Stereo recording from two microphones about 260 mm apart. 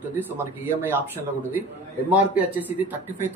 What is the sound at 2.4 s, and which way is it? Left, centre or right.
Speech, centre.